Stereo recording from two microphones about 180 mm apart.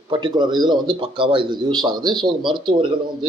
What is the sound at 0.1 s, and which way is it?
Speech, 25° right (ahead or behind).